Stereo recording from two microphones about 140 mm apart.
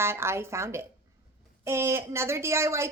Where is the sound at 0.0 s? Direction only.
20° right (ahead or behind).